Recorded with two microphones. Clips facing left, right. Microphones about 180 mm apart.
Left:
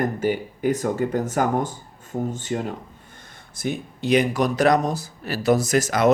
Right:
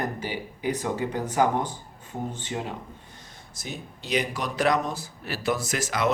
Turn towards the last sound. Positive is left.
turn(degrees=45)  # may be behind; listen again after turning